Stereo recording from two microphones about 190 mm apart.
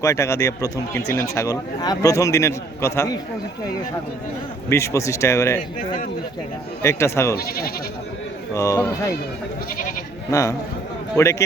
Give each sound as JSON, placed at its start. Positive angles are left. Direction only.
{"t": 0.0, "sound": "speech", "side_deg": 15}
{"t": 4.7, "sound": "speech", "side_deg": 15}
{"t": 6.8, "sound": "speech", "side_deg": 15}
{"t": 7.3, "sound": "speech", "side_deg": 55}
{"t": 8.5, "sound": "speech", "side_deg": 15}
{"t": 11.2, "sound": "speech", "side_deg": 15}